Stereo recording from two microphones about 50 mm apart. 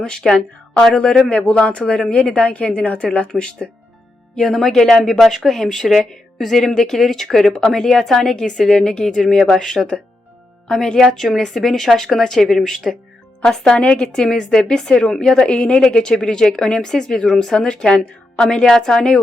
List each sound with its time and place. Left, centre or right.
0.0 s a woman's voice: centre
0.9 s a woman's voice: centre
2.3 s a woman's voice: left; by 19.2 s centre